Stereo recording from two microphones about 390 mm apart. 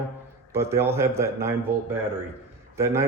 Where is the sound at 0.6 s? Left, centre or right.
Centre.